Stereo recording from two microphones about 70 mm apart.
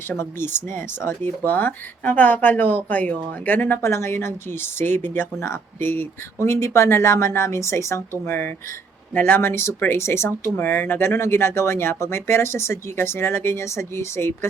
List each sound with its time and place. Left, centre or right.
0.2 s speech: left
8.2 s speech: left